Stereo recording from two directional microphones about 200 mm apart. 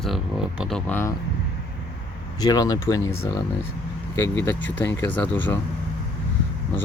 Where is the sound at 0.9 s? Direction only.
10° left (ahead or behind).